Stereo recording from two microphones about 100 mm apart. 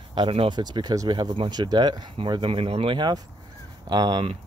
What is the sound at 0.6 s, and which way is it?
Speech, 45° right (ahead or behind).